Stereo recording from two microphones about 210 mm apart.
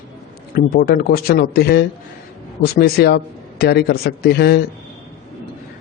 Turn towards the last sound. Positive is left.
turn(degrees=50)  # may be behind; listen again after turning